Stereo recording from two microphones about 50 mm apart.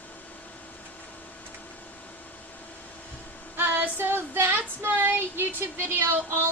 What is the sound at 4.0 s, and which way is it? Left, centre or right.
Female singing, right.